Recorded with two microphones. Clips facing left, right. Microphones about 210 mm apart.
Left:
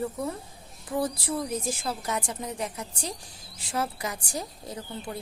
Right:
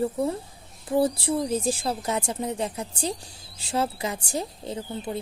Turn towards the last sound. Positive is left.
turn(degrees=-25)  # may be behind; listen again after turning